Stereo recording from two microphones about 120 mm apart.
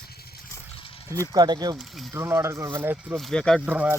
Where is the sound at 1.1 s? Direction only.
30° right (ahead or behind).